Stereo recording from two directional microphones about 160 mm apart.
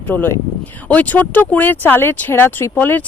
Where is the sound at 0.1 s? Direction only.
10° left (ahead or behind).